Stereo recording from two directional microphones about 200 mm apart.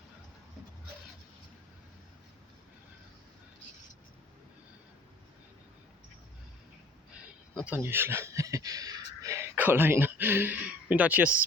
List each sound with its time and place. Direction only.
7.6 s speech: 10° right (ahead or behind)